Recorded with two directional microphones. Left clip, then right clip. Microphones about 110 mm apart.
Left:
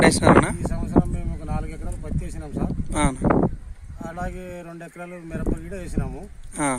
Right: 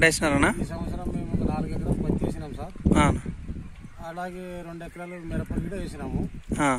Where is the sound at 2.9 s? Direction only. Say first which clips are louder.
Left 2 dB; 5° left (ahead or behind).